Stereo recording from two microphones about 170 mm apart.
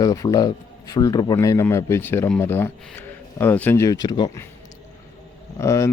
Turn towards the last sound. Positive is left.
turn(degrees=15)  # may be behind; listen again after turning